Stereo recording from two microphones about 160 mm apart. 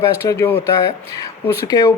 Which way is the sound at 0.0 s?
15° left (ahead or behind).